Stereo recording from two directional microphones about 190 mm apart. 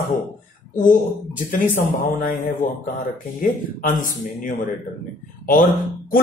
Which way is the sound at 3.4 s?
45° left (ahead or behind).